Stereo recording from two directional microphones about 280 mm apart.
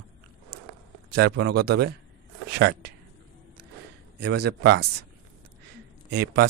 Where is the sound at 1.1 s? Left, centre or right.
Right.